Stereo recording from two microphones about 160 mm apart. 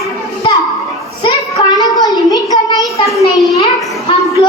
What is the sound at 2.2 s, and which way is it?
Child singing, 20° left (ahead or behind).